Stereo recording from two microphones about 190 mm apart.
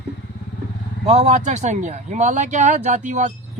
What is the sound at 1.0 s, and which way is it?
Speech, 35° right (ahead or behind).